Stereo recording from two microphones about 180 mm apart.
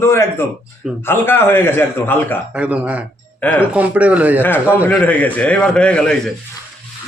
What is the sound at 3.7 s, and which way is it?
Speech, 10° right (ahead or behind).